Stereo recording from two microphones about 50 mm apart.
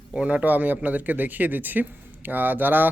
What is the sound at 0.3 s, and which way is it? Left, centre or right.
Speech, right.